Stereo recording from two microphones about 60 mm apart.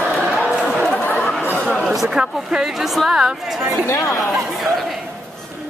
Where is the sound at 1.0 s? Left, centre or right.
Left.